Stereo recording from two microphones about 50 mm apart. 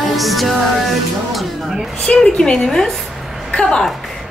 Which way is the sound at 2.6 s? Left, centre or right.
Centre.